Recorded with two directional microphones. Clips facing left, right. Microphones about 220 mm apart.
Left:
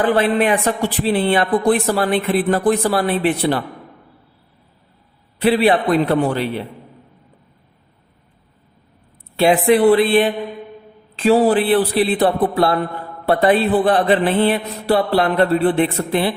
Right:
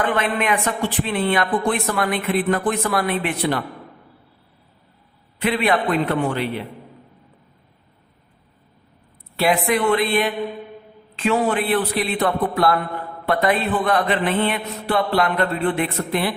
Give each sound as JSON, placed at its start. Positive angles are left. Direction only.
{"t": 0.0, "sound": "speech", "side_deg": 35}
{"t": 5.4, "sound": "speech", "side_deg": 35}
{"t": 9.3, "sound": "speech", "side_deg": 30}